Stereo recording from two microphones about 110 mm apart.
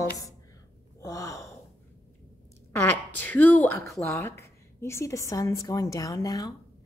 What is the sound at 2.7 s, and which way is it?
A woman's voice, 15° left (ahead or behind).